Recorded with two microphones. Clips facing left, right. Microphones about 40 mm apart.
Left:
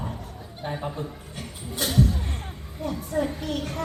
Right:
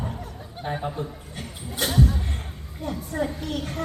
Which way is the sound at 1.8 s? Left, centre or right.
Right.